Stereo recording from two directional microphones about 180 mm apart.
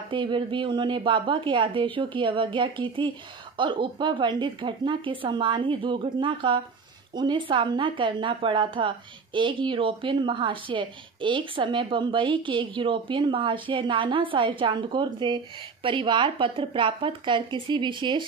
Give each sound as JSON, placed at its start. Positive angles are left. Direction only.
{"t": 0.1, "sound": "a woman's voice", "side_deg": -25}